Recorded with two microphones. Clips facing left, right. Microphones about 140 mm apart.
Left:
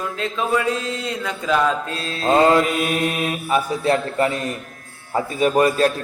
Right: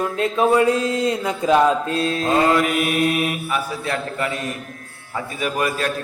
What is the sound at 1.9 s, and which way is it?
A man's voice, 30° left (ahead or behind).